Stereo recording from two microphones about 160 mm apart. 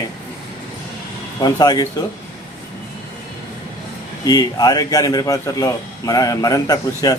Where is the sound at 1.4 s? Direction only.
25° left (ahead or behind).